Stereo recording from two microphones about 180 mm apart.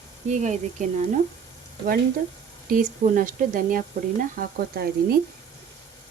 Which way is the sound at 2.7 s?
50° right (ahead or behind).